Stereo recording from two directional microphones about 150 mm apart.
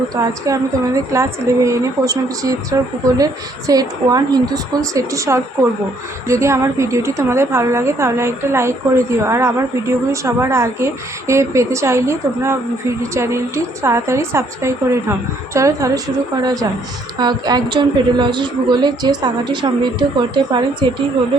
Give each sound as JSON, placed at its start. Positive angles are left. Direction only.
{"t": 0.2, "sound": "a woman's voice", "side_deg": -20}
{"t": 17.2, "sound": "a woman's voice", "side_deg": -30}